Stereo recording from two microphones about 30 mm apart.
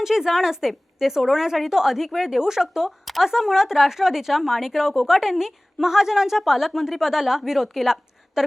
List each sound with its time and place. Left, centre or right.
0.0 s a woman's voice: centre
8.4 s a woman's voice: centre